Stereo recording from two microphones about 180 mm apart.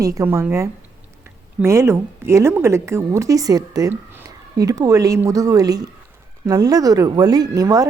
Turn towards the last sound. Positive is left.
turn(degrees=-20)  # may be behind; listen again after turning